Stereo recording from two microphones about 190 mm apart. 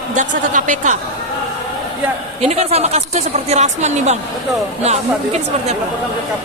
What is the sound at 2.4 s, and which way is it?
Speech, 35° right (ahead or behind).